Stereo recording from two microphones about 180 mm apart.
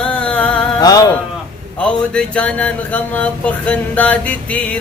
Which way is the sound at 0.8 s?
20° left (ahead or behind).